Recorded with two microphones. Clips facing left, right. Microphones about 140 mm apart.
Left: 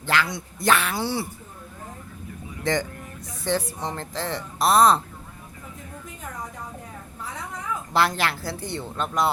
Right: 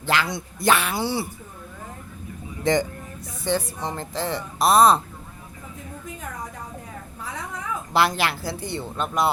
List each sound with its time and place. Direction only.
0.0 s speech: 20° right (ahead or behind)
0.6 s speech: 10° right (ahead or behind)
2.7 s speech: 20° right (ahead or behind)
3.4 s speech: 5° right (ahead or behind)
7.9 s speech: 10° right (ahead or behind)